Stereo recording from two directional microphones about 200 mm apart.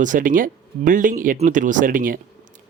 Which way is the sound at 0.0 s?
40° right (ahead or behind).